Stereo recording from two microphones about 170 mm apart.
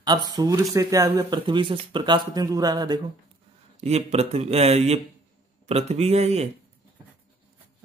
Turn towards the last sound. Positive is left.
turn(degrees=-40)  # may be behind; listen again after turning